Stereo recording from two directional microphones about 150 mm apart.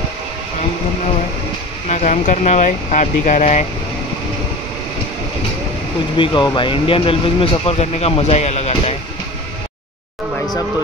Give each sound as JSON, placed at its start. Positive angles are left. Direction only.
{"t": 1.9, "sound": "speech", "side_deg": 50}
{"t": 6.1, "sound": "speech", "side_deg": 35}